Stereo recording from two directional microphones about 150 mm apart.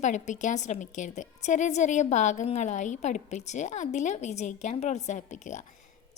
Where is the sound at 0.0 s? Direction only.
55° left (ahead or behind).